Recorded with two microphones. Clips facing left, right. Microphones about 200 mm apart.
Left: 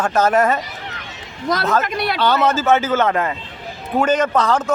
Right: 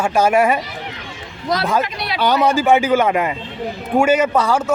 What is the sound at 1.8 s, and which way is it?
Speech, 50° left (ahead or behind).